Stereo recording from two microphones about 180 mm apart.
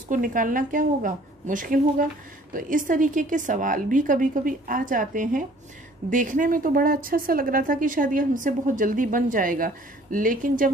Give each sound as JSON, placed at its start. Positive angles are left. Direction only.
{"t": 0.1, "sound": "a woman's voice", "side_deg": -50}